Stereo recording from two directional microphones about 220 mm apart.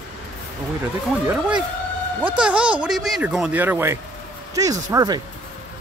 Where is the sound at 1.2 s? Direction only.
5° right (ahead or behind).